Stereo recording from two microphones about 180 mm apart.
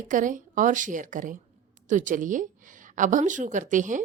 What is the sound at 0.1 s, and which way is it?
A woman's voice, 45° right (ahead or behind).